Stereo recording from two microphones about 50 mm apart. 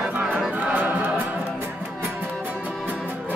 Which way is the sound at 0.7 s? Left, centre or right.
Right.